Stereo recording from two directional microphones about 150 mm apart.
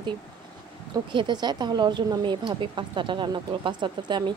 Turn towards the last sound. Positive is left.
turn(degrees=-30)  # may be behind; listen again after turning